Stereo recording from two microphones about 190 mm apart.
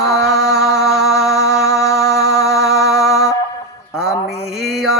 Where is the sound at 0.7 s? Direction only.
Centre (ahead or behind).